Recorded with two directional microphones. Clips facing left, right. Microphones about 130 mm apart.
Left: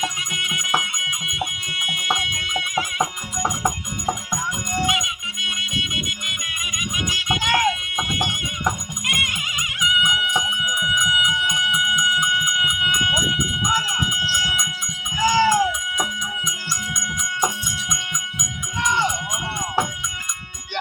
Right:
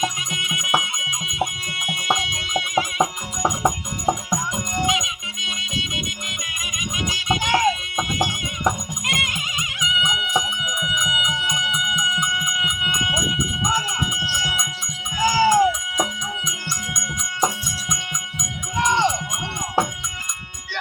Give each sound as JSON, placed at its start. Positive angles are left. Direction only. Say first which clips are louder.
{"t": 0.3, "sound": "music", "louder": "right 2 dB", "side_deg": -25}
{"t": 4.5, "sound": "music", "louder": "left 1 dB", "side_deg": -25}
{"t": 9.0, "sound": "music", "louder": "right 2 dB", "side_deg": -25}
{"t": 17.7, "sound": "music", "louder": "even", "side_deg": -30}